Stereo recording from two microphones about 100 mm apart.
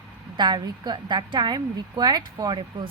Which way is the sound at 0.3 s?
50° right (ahead or behind).